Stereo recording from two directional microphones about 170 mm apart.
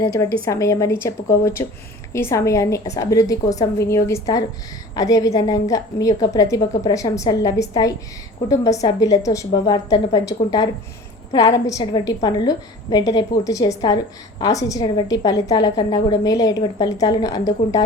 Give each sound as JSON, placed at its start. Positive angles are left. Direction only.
{"t": 0.0, "sound": "a woman's voice", "side_deg": 20}
{"t": 2.1, "sound": "a woman's voice", "side_deg": 15}
{"t": 11.3, "sound": "a woman's voice", "side_deg": 25}